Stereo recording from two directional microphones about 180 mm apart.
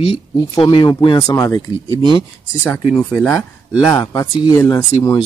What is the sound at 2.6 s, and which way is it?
Speech, 5° left (ahead or behind).